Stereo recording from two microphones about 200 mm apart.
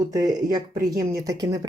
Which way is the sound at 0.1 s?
15° right (ahead or behind).